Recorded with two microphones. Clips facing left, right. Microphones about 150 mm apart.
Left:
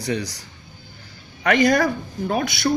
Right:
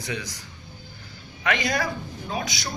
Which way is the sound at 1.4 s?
45° left (ahead or behind).